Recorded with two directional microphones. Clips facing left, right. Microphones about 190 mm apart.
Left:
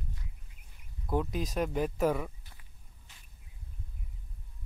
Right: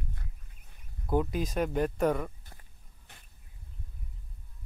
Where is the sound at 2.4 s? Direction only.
45° right (ahead or behind).